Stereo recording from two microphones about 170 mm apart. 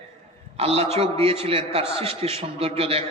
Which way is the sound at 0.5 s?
35° right (ahead or behind).